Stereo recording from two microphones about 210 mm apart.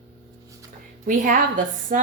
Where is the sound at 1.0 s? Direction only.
40° right (ahead or behind).